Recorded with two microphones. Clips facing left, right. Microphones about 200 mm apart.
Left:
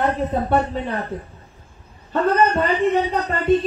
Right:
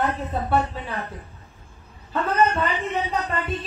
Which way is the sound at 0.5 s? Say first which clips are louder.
Left 4 dB; 40° left (ahead or behind).